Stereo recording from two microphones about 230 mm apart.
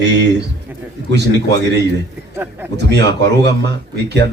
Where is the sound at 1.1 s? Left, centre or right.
Right.